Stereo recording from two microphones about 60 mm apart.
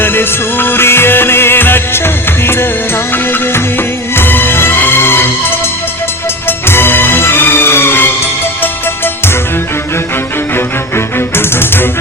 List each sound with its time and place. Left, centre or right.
0.0 s music: left
4.1 s music: left
6.7 s music: left
10.9 s music: left